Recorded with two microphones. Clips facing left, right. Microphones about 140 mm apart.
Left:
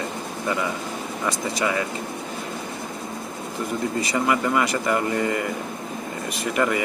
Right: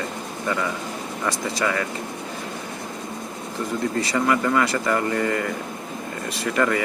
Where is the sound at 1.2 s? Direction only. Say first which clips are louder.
Even; 15° left (ahead or behind).